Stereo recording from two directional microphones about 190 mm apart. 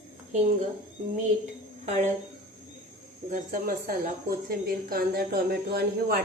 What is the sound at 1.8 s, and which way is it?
Speech, 40° right (ahead or behind).